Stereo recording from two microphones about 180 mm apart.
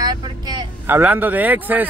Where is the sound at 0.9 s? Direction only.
10° right (ahead or behind).